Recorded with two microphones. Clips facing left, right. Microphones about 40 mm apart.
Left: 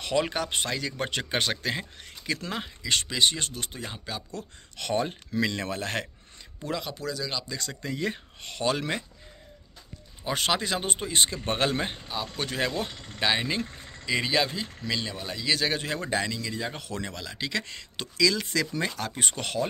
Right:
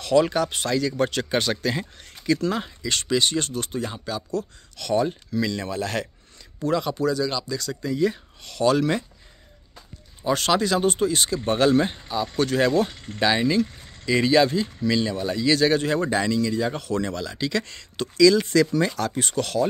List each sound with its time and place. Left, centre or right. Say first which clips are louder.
0.0 s speech: right 7 dB; left
4.7 s speech: right 5 dB; left
6.6 s speech: right 9 dB; centre
7.4 s speech: right 6 dB; left
8.5 s speech: right 7 dB; centre
10.2 s speech: right 6 dB; centre
18.9 s speech: right 6 dB; centre